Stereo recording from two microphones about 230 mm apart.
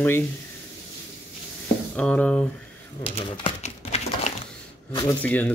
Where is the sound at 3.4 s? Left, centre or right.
Left.